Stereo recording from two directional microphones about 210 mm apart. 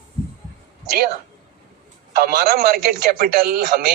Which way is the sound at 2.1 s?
45° right (ahead or behind).